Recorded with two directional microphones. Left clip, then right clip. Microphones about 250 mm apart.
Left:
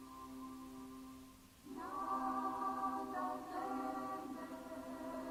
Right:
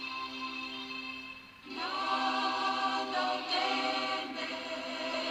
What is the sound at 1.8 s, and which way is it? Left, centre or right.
Choir, right.